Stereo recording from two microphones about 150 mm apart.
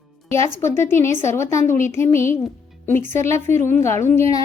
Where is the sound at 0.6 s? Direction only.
15° left (ahead or behind).